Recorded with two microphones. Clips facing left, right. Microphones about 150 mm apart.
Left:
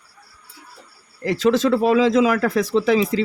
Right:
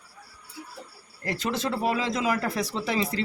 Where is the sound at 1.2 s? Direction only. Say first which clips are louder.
Left 11 dB; 90° left.